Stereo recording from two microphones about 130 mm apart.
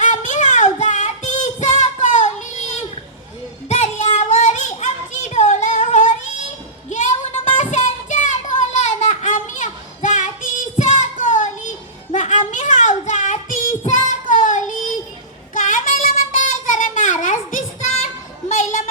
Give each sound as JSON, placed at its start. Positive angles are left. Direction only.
{"t": 0.0, "sound": "music", "side_deg": 70}
{"t": 3.7, "sound": "child singing", "side_deg": 60}
{"t": 6.9, "sound": "a sound", "side_deg": 65}
{"t": 12.1, "sound": "music", "side_deg": 70}
{"t": 12.5, "sound": "child singing", "side_deg": 75}
{"t": 18.0, "sound": "a sound", "side_deg": 65}